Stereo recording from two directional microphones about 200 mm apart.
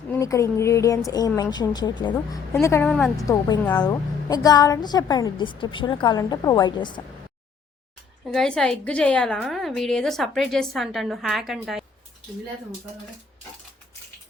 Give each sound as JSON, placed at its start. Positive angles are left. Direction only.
{"t": 0.1, "sound": "a woman's voice", "side_deg": 15}
{"t": 2.9, "sound": "a woman's voice", "side_deg": 5}
{"t": 3.2, "sound": "a woman's voice", "side_deg": 15}
{"t": 8.3, "sound": "a woman's voice", "side_deg": 0}